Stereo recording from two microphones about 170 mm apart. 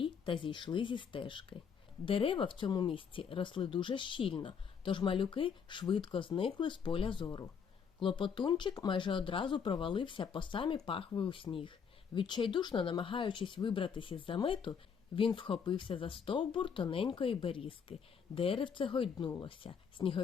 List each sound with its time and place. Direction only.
0.0 s speech: 30° left (ahead or behind)